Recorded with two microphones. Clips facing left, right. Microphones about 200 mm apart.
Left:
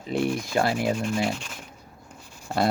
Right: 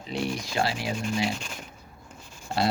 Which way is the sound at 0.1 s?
55° left (ahead or behind).